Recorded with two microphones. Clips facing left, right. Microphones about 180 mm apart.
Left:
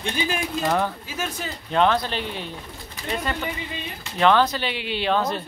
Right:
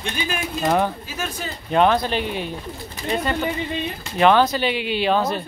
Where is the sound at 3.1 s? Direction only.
30° right (ahead or behind).